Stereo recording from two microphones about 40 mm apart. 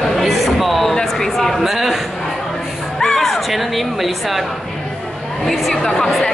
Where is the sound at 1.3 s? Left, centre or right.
Centre.